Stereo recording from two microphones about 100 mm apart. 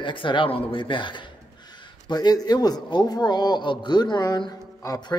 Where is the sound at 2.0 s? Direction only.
45° left (ahead or behind).